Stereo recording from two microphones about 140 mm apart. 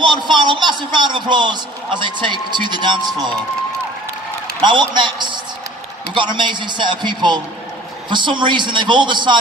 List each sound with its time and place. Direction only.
0.0 s a man's voice: 35° right (ahead or behind)
4.6 s a man's voice: 35° right (ahead or behind)